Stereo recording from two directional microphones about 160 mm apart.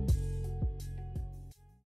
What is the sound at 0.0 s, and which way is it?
Music, centre (ahead or behind).